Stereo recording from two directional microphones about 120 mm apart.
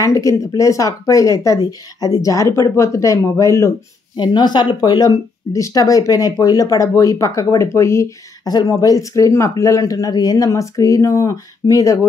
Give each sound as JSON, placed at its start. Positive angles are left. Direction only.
{"t": 0.0, "sound": "speech", "side_deg": 25}
{"t": 4.2, "sound": "speech", "side_deg": 35}